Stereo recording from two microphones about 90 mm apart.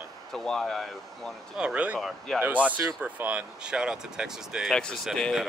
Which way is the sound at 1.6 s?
15° right (ahead or behind).